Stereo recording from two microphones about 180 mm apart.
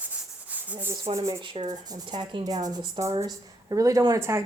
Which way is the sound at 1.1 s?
20° right (ahead or behind).